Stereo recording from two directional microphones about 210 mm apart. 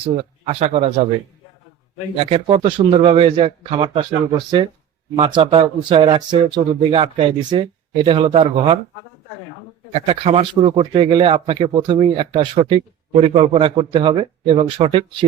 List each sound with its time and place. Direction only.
0.0 s speech: 30° right (ahead or behind)
2.1 s speech: 25° right (ahead or behind)
9.9 s speech: 25° right (ahead or behind)